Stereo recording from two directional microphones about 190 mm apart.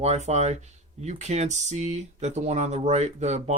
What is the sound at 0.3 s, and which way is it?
Speech, 35° right (ahead or behind).